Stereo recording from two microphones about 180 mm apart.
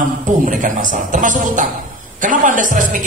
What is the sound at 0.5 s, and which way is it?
A woman's voice, 45° right (ahead or behind).